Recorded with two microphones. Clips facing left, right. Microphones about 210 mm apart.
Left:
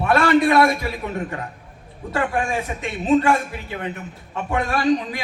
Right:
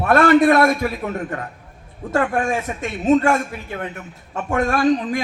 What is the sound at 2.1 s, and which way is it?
A man's voice, 45° right (ahead or behind).